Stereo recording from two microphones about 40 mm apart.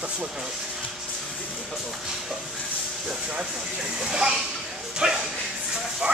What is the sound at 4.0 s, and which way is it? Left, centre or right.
Speech, centre.